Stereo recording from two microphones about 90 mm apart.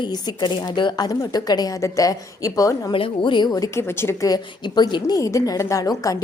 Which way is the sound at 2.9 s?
75° left (ahead or behind).